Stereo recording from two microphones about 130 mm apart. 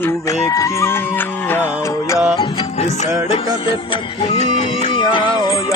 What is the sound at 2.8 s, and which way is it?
Music, 65° left (ahead or behind).